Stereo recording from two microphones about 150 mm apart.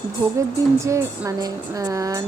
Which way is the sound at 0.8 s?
20° right (ahead or behind).